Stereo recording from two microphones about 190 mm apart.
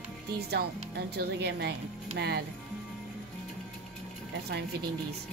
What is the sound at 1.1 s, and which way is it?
Speech, 60° right (ahead or behind).